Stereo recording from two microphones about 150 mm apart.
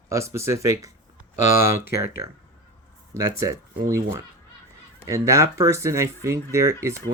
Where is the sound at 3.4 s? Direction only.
20° right (ahead or behind).